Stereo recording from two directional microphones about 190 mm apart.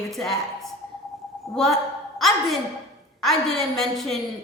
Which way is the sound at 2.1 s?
Centre (ahead or behind).